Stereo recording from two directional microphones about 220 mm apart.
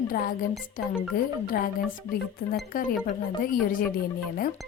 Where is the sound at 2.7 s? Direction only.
40° left (ahead or behind).